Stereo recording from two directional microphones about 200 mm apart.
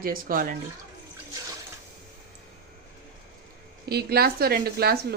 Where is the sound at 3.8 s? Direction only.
50° right (ahead or behind).